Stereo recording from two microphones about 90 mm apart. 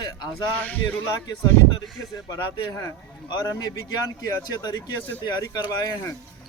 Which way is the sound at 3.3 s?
45° left (ahead or behind).